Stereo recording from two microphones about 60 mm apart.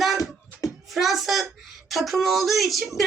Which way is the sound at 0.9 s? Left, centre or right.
Centre.